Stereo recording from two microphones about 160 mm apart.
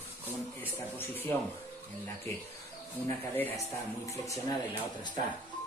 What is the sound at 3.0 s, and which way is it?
Speech, 15° left (ahead or behind).